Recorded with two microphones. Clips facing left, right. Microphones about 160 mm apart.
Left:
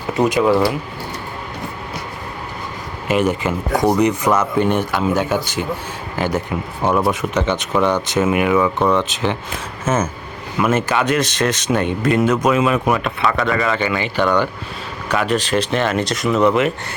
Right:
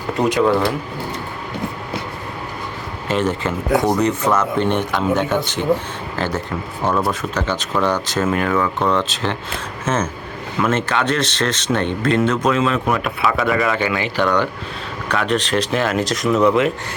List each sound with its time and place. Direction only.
0.1 s speech: 5° left (ahead or behind)
3.1 s speech: 10° left (ahead or behind)
13.1 s speech: 5° right (ahead or behind)